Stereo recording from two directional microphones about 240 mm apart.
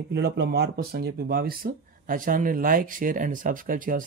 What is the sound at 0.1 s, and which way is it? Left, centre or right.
Speech, right.